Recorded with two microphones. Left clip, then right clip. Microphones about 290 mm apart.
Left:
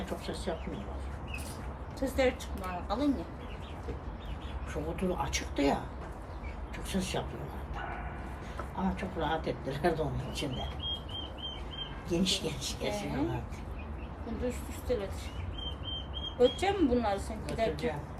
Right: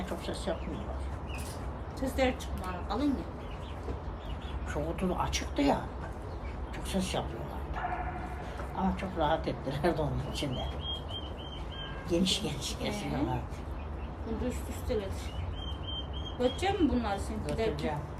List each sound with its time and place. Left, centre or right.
0.5 s speech: centre
2.0 s speech: centre
4.7 s speech: centre
6.9 s speech: centre
8.8 s speech: centre
12.0 s speech: centre
14.9 s speech: centre
16.4 s speech: centre